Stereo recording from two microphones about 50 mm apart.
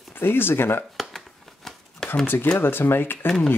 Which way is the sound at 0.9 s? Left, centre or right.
Centre.